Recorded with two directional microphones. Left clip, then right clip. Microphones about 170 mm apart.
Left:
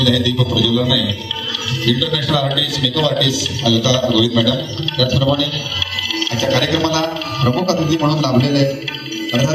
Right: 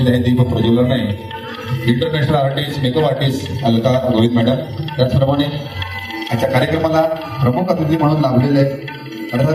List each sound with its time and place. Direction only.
0.0 s a man's voice: 45° right (ahead or behind)